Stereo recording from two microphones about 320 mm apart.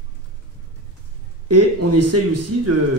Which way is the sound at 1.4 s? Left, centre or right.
Right.